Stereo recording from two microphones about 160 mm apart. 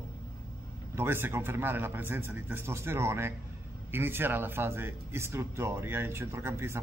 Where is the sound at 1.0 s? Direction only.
15° right (ahead or behind).